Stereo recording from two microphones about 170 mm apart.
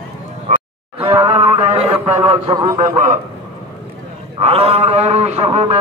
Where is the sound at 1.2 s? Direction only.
35° right (ahead or behind).